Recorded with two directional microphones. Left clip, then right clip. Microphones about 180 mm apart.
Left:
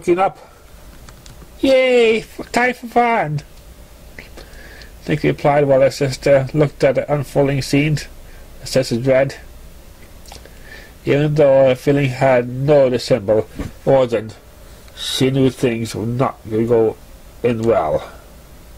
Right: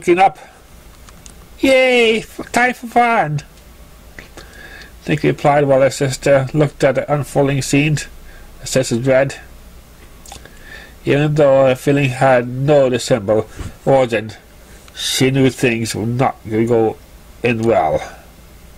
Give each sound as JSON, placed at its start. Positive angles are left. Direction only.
{"t": 0.0, "sound": "speech", "side_deg": -25}
{"t": 1.6, "sound": "speech", "side_deg": -20}
{"t": 5.0, "sound": "speech", "side_deg": -15}
{"t": 11.1, "sound": "speech", "side_deg": -10}